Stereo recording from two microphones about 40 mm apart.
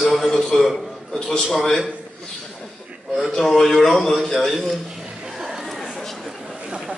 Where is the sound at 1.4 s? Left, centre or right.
Centre.